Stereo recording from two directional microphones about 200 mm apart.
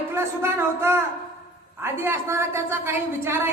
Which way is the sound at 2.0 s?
15° right (ahead or behind).